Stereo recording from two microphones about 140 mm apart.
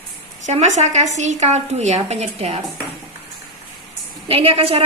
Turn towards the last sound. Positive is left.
turn(degrees=-40)  # may be behind; listen again after turning